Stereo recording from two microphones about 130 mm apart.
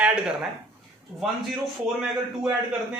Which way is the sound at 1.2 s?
Centre (ahead or behind).